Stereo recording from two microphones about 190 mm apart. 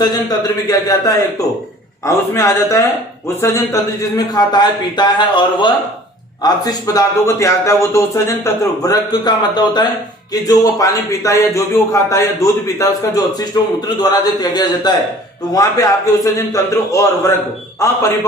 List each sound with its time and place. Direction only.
0.0 s a man's voice: 20° left (ahead or behind)